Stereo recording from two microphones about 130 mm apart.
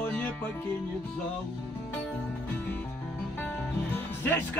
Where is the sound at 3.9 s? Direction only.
15° left (ahead or behind).